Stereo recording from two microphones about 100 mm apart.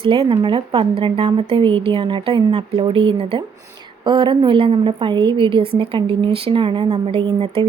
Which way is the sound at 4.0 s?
50° right (ahead or behind).